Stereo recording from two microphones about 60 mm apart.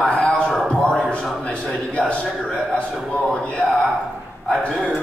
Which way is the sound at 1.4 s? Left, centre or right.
Centre.